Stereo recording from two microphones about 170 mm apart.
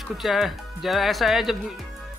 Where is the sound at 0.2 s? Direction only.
Centre (ahead or behind).